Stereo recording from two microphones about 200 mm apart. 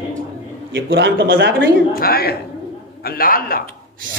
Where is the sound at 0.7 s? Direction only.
60° right (ahead or behind).